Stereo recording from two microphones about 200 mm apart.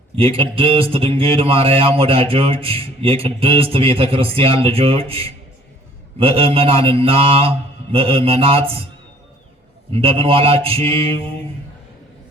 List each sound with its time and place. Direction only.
0.2 s speech: 25° right (ahead or behind)
9.9 s speech: 30° right (ahead or behind)